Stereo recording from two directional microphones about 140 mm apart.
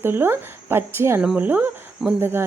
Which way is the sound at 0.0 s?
15° right (ahead or behind).